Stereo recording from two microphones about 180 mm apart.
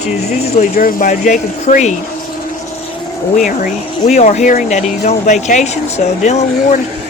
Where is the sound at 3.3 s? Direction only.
50° left (ahead or behind).